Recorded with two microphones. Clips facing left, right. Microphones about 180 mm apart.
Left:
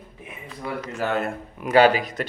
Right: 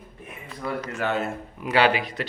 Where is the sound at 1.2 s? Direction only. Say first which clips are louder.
Left 1 dB; 45° left (ahead or behind).